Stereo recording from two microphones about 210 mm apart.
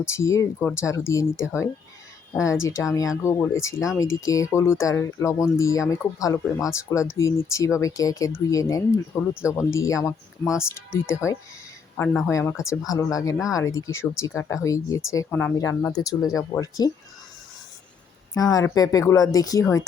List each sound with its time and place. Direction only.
0.0 s speech: 15° left (ahead or behind)
18.3 s speech: 15° left (ahead or behind)